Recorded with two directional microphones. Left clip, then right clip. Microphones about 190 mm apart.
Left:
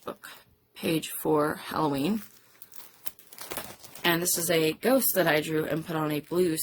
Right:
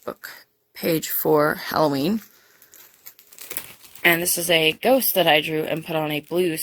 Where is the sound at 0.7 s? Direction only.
35° right (ahead or behind).